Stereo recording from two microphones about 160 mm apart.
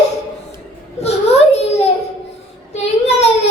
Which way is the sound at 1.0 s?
40° left (ahead or behind).